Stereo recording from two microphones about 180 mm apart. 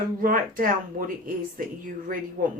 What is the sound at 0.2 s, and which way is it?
Speech, 50° right (ahead or behind).